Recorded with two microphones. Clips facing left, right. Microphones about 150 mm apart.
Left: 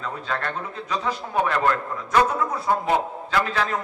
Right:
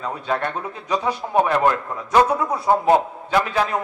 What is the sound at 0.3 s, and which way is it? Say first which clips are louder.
A man's voice: right 5 dB; 15° right (ahead or behind).